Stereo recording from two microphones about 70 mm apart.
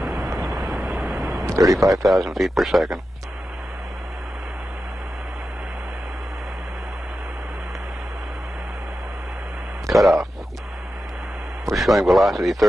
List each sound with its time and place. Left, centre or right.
0.0 s vehicle: centre
1.4 s a sound: right
2.0 s speech: centre
9.9 s speech: centre
11.7 s speech: centre